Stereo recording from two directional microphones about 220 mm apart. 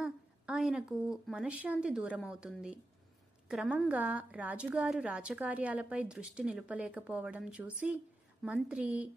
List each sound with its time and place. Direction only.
0.0 s a woman's voice: 5° right (ahead or behind)